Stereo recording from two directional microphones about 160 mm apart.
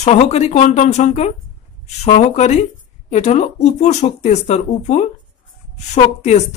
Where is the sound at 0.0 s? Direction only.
45° left (ahead or behind).